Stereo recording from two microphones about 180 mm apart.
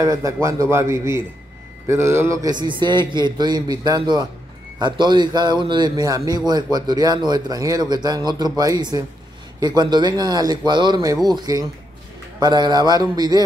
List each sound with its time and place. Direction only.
0.0 s a man's voice: 20° right (ahead or behind)